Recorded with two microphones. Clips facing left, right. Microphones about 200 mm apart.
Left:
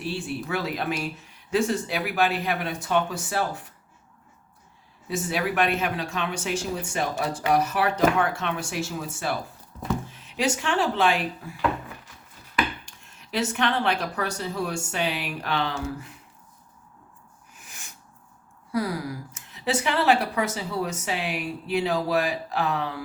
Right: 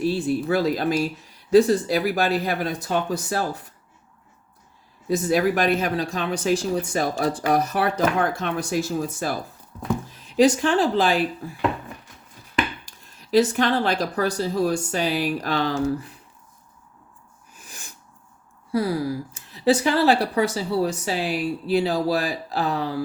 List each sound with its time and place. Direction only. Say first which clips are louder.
0.0 s speech: right 8 dB; 40° right (ahead or behind)
5.0 s speech: right 7 dB; 40° right (ahead or behind)
12.5 s speech: right 2 dB; 35° right (ahead or behind)
17.7 s sneeze: right 4 dB; 35° right (ahead or behind)
18.7 s speech: right 5 dB; 30° right (ahead or behind)